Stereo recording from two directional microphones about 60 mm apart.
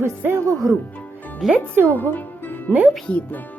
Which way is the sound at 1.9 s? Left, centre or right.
Left.